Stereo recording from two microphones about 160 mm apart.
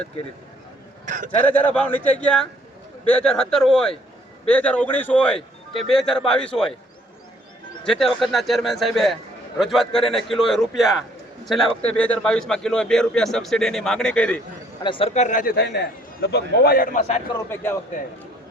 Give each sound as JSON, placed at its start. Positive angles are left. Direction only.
{"t": 1.0, "sound": "speech", "side_deg": -50}
{"t": 1.4, "sound": "a man's voice", "side_deg": 10}
{"t": 7.9, "sound": "a man's voice", "side_deg": 0}
{"t": 14.8, "sound": "a man's voice", "side_deg": 35}
{"t": 17.3, "sound": "speech", "side_deg": 15}